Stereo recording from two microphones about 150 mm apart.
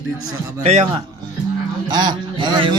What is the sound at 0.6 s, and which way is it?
Speech, 45° right (ahead or behind).